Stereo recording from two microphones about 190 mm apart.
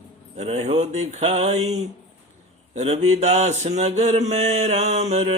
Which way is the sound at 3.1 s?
35° right (ahead or behind).